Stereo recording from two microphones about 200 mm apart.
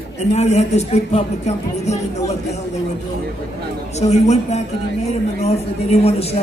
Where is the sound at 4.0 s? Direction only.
35° left (ahead or behind).